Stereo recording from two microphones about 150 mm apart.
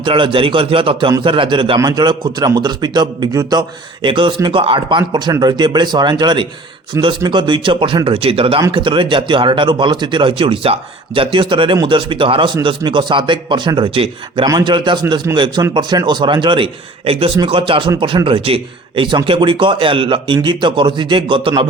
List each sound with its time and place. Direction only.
0.0 s a man's voice: 35° right (ahead or behind)
15.3 s a man's voice: 20° right (ahead or behind)
15.7 s speech: 30° right (ahead or behind)